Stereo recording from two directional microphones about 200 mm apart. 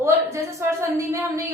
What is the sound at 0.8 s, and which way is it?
Speech, 15° right (ahead or behind).